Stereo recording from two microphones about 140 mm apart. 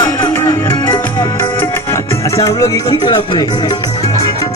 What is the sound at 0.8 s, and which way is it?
Music, 20° left (ahead or behind).